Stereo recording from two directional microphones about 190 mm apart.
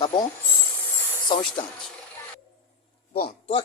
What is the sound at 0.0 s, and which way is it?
Speech, 25° left (ahead or behind).